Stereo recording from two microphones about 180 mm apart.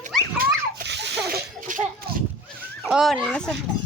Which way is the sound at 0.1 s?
Centre (ahead or behind).